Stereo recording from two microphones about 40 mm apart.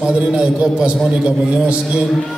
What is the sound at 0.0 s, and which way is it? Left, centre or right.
A man's voice, right.